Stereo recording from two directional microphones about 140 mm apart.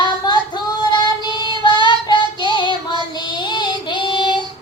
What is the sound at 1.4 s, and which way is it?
Child singing, 35° left (ahead or behind).